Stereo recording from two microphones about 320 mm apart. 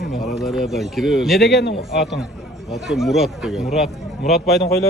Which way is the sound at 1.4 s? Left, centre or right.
Left.